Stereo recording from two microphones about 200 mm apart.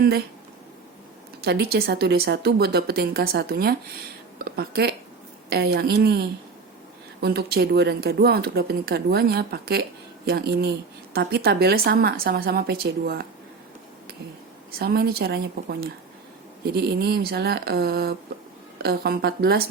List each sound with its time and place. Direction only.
1.4 s a woman's voice: 55° right (ahead or behind)
14.8 s a woman's voice: 50° right (ahead or behind)